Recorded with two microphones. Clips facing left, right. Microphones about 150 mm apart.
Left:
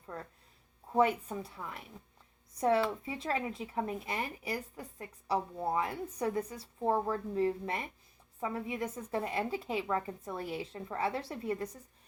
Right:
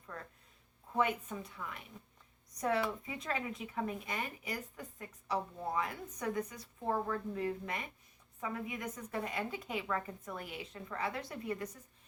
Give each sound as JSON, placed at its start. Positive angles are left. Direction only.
{"t": 0.9, "sound": "a woman's voice", "side_deg": 35}